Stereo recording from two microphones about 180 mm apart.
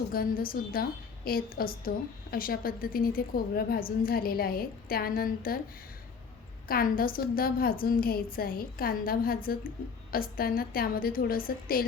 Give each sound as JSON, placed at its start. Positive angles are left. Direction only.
{"t": 0.1, "sound": "a woman's voice", "side_deg": 55}
{"t": 6.7, "sound": "a woman's voice", "side_deg": 55}